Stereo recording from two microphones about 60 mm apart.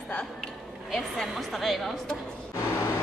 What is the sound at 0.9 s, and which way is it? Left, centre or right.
A woman's voice, centre.